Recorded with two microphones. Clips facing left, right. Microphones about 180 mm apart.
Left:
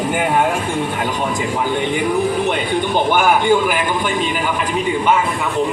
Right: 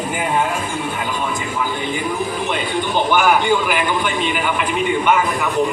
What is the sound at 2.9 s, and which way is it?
Speech, 50° left (ahead or behind).